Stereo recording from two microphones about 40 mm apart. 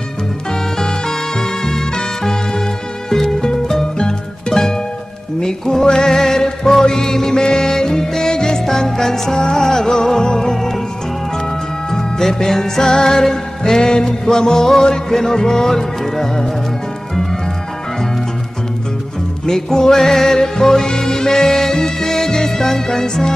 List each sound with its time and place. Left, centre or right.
0.5 s music: centre
11.9 s music: centre
19.4 s music: centre